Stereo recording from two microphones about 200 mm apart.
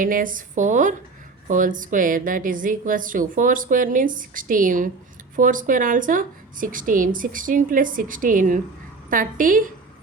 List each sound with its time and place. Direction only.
0.0 s a woman's voice: 45° right (ahead or behind)